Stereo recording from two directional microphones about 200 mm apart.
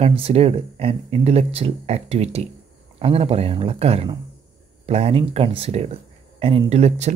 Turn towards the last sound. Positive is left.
turn(degrees=-30)  # may be behind; listen again after turning